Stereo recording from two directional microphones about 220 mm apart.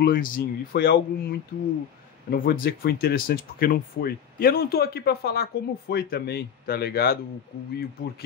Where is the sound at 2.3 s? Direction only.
40° left (ahead or behind).